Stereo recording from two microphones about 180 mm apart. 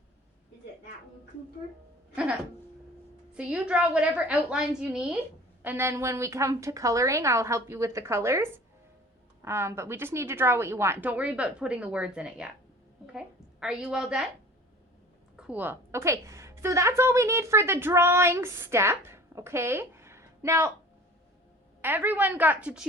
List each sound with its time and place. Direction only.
3.3 s a woman's voice: 5° right (ahead or behind)
15.4 s a woman's voice: 10° right (ahead or behind)
21.8 s a woman's voice: 10° right (ahead or behind)